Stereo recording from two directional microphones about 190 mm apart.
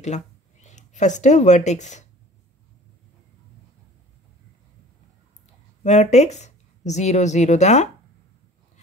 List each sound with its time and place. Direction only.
0.0 s speech: 40° left (ahead or behind)
5.9 s speech: 40° left (ahead or behind)